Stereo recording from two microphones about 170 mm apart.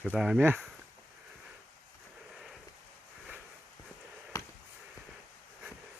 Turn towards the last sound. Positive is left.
turn(degrees=20)  # may be behind; listen again after turning